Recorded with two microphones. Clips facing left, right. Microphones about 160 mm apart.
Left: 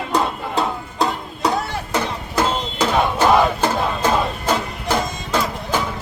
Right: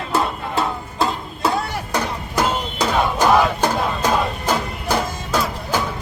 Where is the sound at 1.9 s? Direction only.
10° right (ahead or behind).